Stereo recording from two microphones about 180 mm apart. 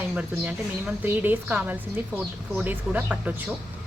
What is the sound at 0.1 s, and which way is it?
A woman's voice, 5° right (ahead or behind).